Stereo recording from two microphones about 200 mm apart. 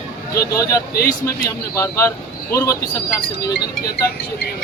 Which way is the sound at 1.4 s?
15° left (ahead or behind).